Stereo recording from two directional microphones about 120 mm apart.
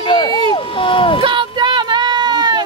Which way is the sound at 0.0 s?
40° left (ahead or behind).